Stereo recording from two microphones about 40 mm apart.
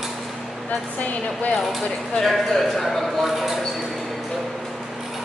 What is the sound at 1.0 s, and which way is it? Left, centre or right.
Speech, left.